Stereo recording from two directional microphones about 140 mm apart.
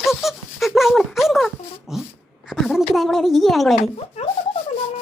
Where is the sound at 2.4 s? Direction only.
Centre (ahead or behind).